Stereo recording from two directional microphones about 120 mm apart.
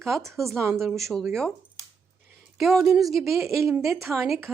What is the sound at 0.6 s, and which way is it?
Speech, 20° right (ahead or behind).